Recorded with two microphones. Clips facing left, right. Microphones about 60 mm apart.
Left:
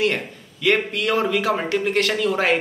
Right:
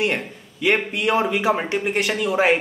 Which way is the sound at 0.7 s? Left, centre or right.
Centre.